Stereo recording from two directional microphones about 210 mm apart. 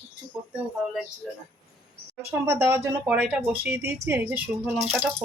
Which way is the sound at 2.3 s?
10° right (ahead or behind).